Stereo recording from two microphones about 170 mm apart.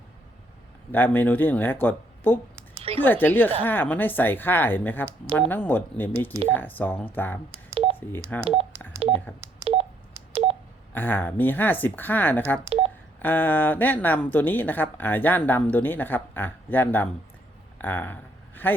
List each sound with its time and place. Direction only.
0.9 s speech: 10° left (ahead or behind)
7.7 s telephone dialing: 35° right (ahead or behind)
8.3 s speech: 10° left (ahead or behind)
9.0 s telephone dialing: 35° right (ahead or behind)
10.3 s telephone dialing: 35° right (ahead or behind)
10.9 s speech: 10° left (ahead or behind)
17.7 s a sound: 10° left (ahead or behind)